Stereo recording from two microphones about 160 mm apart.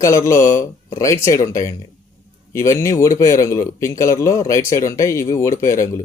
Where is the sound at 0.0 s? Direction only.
20° left (ahead or behind).